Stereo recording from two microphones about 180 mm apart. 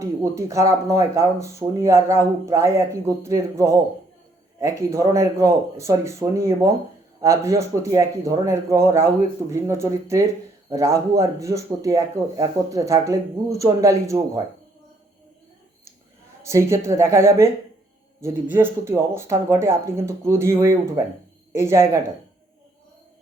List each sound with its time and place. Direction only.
0.0 s speech: 15° right (ahead or behind)
16.4 s speech: 15° right (ahead or behind)